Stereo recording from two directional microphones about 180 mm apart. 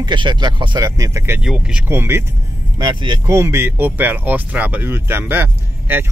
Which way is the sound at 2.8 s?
25° right (ahead or behind).